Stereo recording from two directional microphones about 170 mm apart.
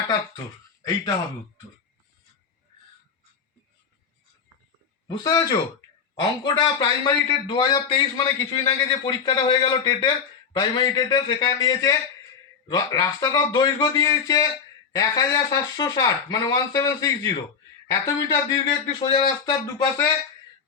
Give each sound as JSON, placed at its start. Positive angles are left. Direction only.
{"t": 5.0, "sound": "a man's voice", "side_deg": 25}